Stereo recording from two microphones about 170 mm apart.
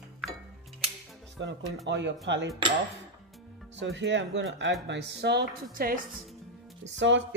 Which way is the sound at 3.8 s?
90° right.